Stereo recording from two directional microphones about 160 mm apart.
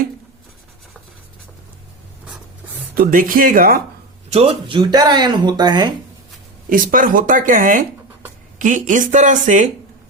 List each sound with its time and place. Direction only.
2.9 s speech: 60° right (ahead or behind)
4.3 s speech: 40° right (ahead or behind)
6.7 s speech: 55° right (ahead or behind)